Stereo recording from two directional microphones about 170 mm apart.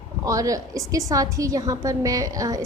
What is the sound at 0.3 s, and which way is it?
A woman's voice, 20° right (ahead or behind).